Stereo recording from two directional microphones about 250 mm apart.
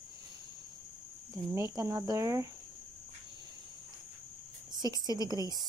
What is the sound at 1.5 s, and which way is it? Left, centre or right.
Speech, centre.